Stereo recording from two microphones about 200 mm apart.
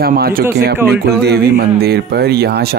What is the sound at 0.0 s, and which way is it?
Speech, 45° right (ahead or behind).